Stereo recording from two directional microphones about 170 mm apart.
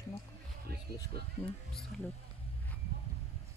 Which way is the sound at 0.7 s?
65° right (ahead or behind).